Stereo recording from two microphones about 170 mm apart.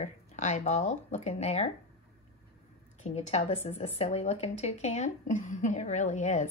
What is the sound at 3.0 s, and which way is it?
Speech, 40° left (ahead or behind).